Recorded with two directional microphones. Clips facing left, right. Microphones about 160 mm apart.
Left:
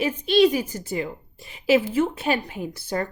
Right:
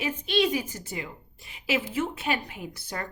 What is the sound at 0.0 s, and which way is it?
A woman's voice, 35° left (ahead or behind).